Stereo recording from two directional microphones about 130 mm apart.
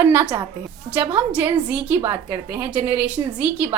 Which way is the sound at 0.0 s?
15° right (ahead or behind).